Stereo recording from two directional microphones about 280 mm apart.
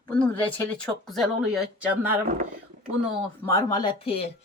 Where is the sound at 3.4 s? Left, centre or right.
Centre.